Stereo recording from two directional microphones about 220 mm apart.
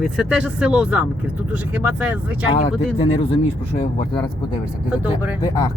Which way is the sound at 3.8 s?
25° left (ahead or behind).